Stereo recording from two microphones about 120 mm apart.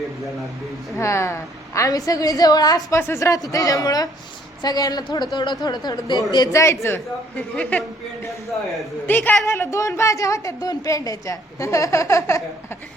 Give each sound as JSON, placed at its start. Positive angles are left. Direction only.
{"t": 0.9, "sound": "a woman's voice", "side_deg": 25}
{"t": 8.4, "sound": "a man's voice", "side_deg": 0}
{"t": 9.0, "sound": "a man's voice", "side_deg": 15}